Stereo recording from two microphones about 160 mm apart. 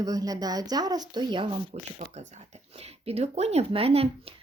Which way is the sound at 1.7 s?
45° right (ahead or behind).